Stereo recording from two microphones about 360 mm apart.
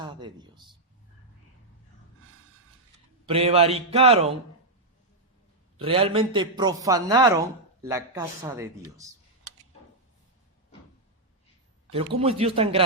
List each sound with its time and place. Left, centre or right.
0.0 s speech: centre
3.2 s a man's voice: centre
5.7 s a man's voice: centre
11.9 s a man's voice: centre